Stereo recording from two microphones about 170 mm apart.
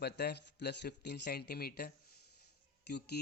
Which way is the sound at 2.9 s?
75° left (ahead or behind).